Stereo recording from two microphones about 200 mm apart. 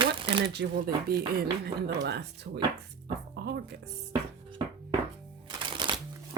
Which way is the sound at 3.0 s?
55° right (ahead or behind).